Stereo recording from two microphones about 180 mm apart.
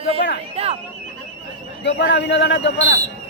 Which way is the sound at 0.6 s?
35° right (ahead or behind).